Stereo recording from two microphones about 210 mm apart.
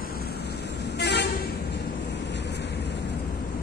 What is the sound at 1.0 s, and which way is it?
Vehicle, 55° left (ahead or behind).